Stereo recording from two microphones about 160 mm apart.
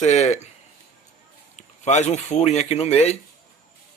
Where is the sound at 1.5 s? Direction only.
45° left (ahead or behind).